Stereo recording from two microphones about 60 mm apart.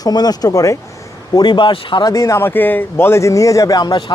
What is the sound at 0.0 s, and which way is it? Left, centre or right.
Speech, left.